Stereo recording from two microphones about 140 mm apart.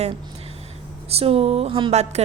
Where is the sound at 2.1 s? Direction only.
50° right (ahead or behind).